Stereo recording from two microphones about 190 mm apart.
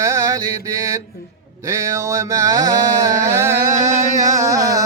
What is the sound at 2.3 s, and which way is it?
Music, 20° right (ahead or behind).